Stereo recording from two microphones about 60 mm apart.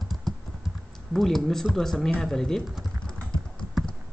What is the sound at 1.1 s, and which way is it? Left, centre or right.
A man's voice, centre.